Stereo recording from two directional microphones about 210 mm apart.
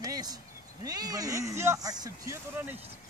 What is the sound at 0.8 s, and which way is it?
Speech, 20° right (ahead or behind).